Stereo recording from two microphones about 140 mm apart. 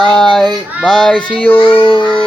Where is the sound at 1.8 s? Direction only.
35° left (ahead or behind).